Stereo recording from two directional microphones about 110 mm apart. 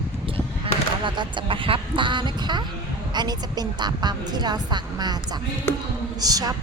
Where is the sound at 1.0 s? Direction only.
45° right (ahead or behind).